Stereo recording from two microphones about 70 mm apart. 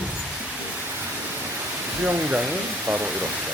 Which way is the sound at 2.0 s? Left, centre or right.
Right.